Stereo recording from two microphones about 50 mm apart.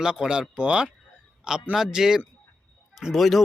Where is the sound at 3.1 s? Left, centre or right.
Centre.